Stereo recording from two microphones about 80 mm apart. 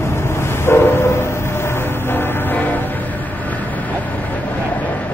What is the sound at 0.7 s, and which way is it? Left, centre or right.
Train, left.